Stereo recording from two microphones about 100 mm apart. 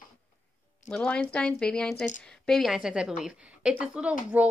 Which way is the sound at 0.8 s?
10° left (ahead or behind).